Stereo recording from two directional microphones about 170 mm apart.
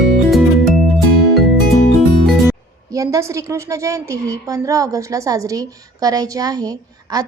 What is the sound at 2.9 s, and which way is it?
A woman's voice, 20° right (ahead or behind).